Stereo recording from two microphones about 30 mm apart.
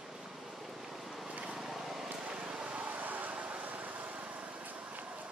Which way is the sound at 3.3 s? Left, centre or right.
Right.